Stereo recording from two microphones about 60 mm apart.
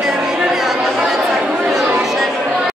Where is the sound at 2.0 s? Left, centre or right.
Centre.